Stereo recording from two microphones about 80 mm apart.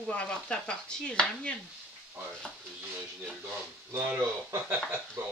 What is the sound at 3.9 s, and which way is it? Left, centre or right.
Speech, right.